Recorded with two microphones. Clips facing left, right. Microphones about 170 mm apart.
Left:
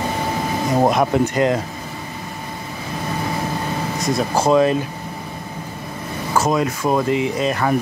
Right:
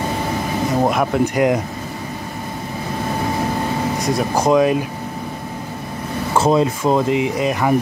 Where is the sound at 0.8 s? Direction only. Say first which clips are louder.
Left 1 dB; 10° right (ahead or behind).